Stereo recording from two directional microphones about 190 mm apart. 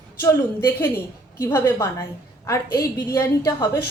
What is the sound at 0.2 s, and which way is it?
A woman's voice, 15° left (ahead or behind).